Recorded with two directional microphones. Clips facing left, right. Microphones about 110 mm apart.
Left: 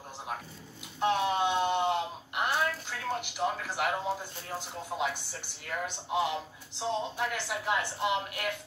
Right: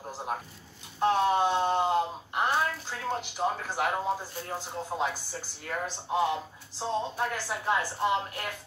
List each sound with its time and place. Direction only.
0.9 s a woman's voice: 35° right (ahead or behind)